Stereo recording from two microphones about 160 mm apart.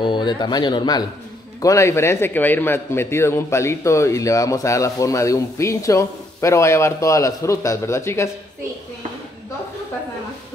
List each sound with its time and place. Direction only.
0.0 s a man's voice: 30° left (ahead or behind)